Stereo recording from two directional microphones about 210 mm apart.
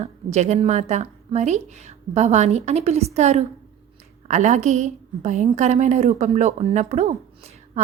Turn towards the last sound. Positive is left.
turn(degrees=-30)  # may be behind; listen again after turning